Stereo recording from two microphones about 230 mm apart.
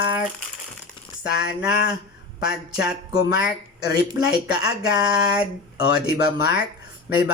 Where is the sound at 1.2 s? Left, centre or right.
Left.